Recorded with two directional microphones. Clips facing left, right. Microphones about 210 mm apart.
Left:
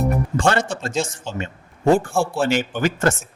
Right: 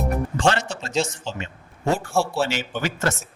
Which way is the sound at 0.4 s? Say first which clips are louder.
Left 1 dB; 50° left (ahead or behind).